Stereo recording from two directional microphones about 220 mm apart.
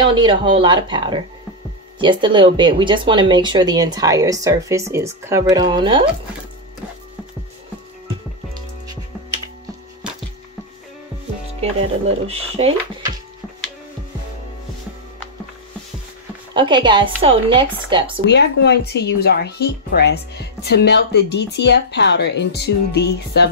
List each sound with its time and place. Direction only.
0.0 s speech: 20° right (ahead or behind)
12.3 s speech: 25° right (ahead or behind)
16.5 s speech: 20° right (ahead or behind)
18.2 s speech: 50° left (ahead or behind)